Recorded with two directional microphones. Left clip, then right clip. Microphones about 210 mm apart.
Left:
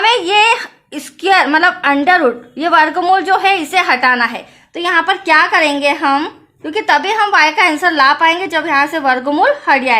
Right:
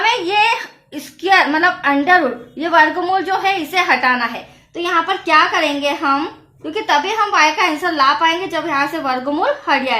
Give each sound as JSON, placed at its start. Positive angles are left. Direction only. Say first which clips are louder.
{"t": 0.0, "sound": "a woman's voice", "louder": "left 4 dB", "side_deg": 40}